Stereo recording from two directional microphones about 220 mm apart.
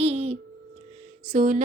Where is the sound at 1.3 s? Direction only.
35° right (ahead or behind).